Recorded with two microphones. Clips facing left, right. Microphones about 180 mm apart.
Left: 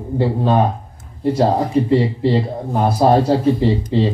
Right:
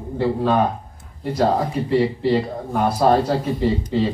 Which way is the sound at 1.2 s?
30° left (ahead or behind).